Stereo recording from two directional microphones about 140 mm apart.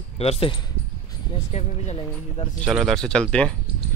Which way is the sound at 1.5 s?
45° left (ahead or behind).